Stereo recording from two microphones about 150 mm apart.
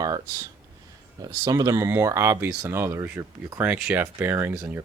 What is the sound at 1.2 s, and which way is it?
Speech, 25° right (ahead or behind).